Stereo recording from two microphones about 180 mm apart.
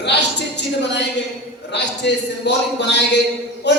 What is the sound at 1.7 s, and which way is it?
A man's voice, 70° left (ahead or behind).